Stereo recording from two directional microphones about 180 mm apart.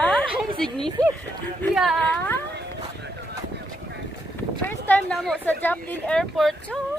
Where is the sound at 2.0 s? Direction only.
10° left (ahead or behind).